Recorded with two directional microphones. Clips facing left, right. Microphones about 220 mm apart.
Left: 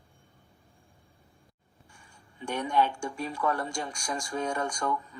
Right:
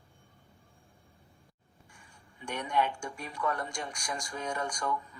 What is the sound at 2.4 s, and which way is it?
Speech, 30° left (ahead or behind).